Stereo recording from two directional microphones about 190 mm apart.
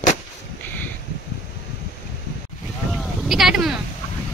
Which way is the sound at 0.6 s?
10° left (ahead or behind).